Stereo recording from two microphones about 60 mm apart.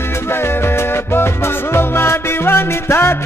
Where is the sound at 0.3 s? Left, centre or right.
Left.